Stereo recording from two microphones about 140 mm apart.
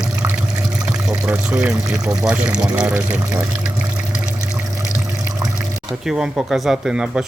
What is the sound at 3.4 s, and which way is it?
Water, 5° right (ahead or behind).